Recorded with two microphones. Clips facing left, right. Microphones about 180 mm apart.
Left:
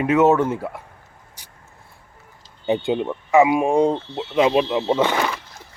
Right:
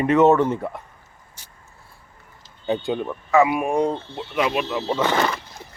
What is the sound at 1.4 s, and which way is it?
Vehicle, 15° left (ahead or behind).